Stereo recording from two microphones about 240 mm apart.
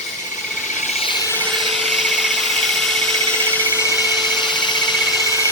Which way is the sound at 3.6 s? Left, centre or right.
Centre.